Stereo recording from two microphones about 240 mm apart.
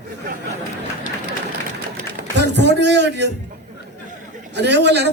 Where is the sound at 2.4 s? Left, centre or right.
Right.